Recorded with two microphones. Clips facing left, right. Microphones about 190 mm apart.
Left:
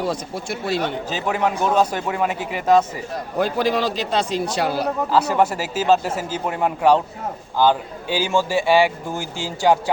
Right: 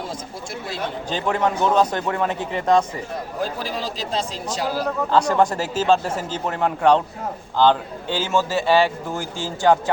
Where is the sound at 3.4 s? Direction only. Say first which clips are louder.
Left 8 dB; 70° left (ahead or behind).